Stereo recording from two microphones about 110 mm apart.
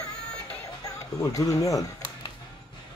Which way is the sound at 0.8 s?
30° left (ahead or behind).